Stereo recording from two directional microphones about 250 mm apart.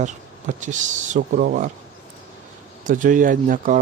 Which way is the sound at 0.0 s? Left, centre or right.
Right.